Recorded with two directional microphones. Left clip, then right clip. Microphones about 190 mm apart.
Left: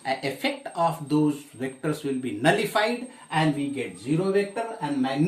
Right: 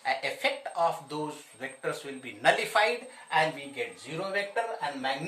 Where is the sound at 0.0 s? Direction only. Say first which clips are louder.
Left 2 dB; 10° left (ahead or behind).